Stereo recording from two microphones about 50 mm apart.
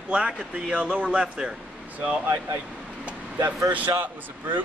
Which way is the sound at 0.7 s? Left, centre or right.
Right.